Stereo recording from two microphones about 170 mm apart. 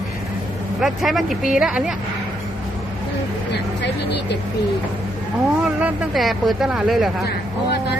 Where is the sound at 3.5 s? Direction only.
80° left.